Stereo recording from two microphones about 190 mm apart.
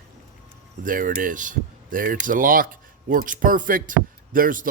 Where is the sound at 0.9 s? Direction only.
45° right (ahead or behind).